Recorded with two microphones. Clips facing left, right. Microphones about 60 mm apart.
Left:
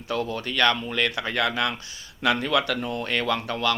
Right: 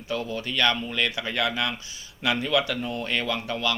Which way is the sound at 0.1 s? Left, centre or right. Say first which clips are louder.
Left 2 dB; left.